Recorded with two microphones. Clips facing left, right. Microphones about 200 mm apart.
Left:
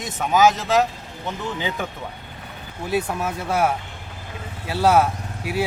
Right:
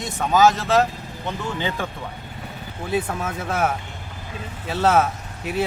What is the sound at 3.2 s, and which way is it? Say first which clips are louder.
Speech: left 2 dB; 5° left (ahead or behind).